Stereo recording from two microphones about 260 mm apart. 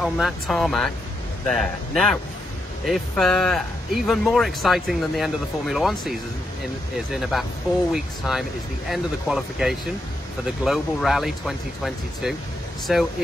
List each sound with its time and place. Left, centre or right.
0.0 s speech: centre
7.2 s speech: centre